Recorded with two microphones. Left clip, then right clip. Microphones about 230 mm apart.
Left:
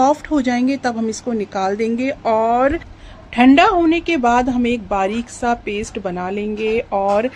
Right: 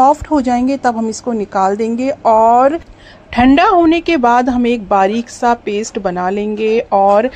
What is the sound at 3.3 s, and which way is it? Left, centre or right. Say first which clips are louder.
A woman's voice: right 2 dB; centre.